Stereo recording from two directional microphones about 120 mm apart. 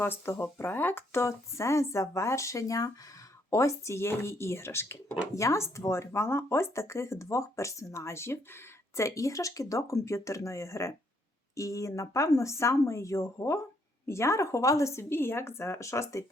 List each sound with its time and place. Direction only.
0.0 s speech: 20° left (ahead or behind)